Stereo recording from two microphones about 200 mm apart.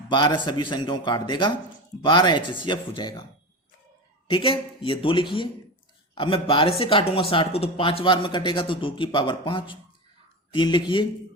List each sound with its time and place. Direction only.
0.1 s speech: 20° left (ahead or behind)
4.3 s speech: 25° left (ahead or behind)